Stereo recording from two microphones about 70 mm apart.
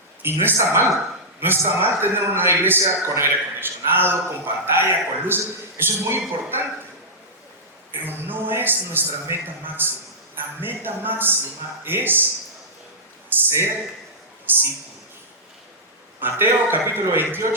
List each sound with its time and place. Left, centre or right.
0.2 s a man's voice: right
1.4 s a man's voice: right
7.9 s a man's voice: right
13.3 s a man's voice: right
16.2 s a man's voice: right